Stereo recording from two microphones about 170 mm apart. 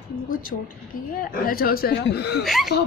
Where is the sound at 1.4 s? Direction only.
60° left (ahead or behind).